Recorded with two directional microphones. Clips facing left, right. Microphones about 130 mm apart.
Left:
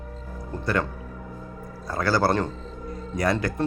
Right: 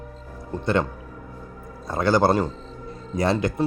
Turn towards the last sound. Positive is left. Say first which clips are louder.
# right 2 dB
turn(degrees=-25)  # may be behind; listen again after turning